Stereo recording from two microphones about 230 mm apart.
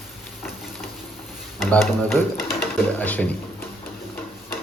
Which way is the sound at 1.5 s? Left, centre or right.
Centre.